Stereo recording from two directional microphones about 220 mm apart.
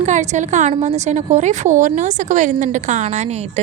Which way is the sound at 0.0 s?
35° right (ahead or behind).